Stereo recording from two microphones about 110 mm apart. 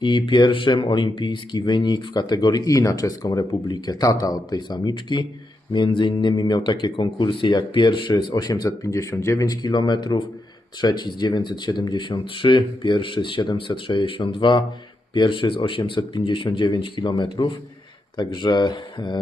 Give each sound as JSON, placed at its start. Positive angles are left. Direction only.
{"t": 0.0, "sound": "speech", "side_deg": 45}